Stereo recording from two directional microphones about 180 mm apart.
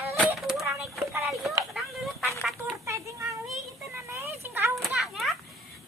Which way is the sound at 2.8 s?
15° right (ahead or behind).